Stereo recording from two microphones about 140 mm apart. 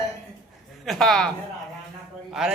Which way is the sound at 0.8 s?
Centre (ahead or behind).